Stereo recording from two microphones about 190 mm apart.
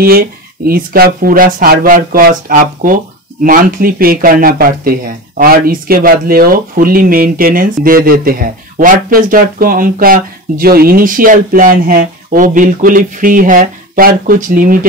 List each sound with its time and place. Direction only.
0.0 s speech: 50° right (ahead or behind)